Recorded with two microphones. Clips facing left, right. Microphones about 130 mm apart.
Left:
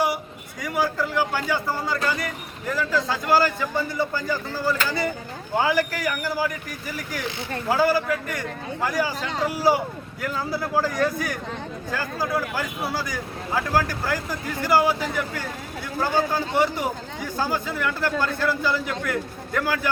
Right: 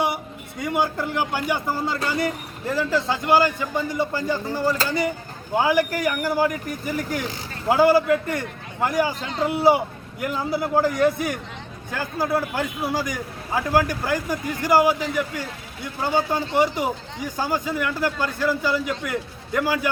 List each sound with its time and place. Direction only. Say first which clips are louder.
0.6 s a man's voice: right 1 dB; 25° right (ahead or behind)
16.1 s a man's voice: right 2 dB; 15° right (ahead or behind)